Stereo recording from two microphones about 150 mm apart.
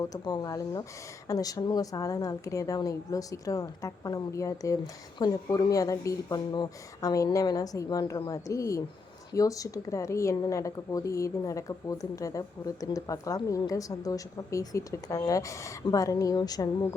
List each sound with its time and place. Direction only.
0.0 s a woman's voice: 25° left (ahead or behind)